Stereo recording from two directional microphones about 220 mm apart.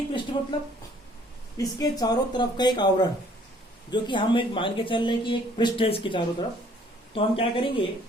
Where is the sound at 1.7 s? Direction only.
15° left (ahead or behind).